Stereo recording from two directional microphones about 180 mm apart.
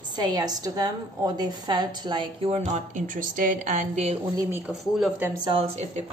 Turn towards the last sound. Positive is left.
turn(degrees=-35)  # may be behind; listen again after turning